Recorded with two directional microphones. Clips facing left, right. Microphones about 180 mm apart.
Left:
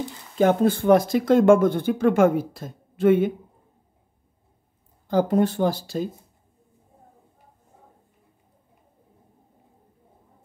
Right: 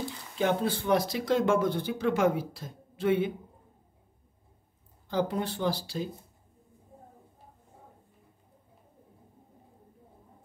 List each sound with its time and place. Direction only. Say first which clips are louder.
0.4 s speech: left 9 dB; 45° left (ahead or behind)
5.0 s speech: left 9 dB; 45° left (ahead or behind)